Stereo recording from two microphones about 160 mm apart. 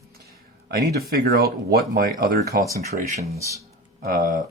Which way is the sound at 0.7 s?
70° right (ahead or behind).